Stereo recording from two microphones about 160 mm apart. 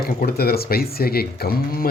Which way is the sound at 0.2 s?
75° left (ahead or behind).